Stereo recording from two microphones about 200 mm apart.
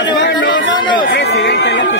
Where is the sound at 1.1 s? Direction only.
60° left (ahead or behind).